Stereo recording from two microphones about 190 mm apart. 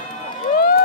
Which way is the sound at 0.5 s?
55° left (ahead or behind).